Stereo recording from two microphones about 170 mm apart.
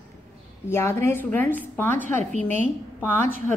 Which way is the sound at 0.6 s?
15° left (ahead or behind).